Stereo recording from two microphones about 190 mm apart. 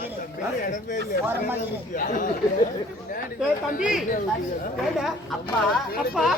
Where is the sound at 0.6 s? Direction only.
45° left (ahead or behind).